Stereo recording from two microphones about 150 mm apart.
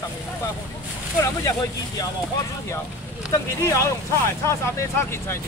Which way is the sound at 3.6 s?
20° left (ahead or behind).